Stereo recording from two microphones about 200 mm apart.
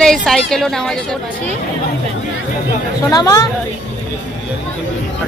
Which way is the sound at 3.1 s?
20° left (ahead or behind).